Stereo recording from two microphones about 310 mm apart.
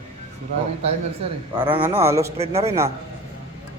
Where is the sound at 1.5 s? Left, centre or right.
Centre.